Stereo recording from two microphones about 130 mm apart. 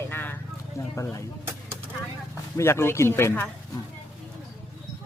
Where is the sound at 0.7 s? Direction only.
25° left (ahead or behind).